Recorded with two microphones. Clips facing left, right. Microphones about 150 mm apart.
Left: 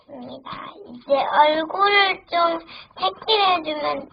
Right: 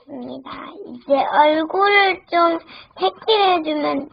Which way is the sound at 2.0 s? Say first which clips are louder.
Right 4 dB; 45° right (ahead or behind).